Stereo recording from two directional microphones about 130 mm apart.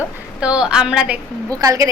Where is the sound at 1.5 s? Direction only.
25° right (ahead or behind).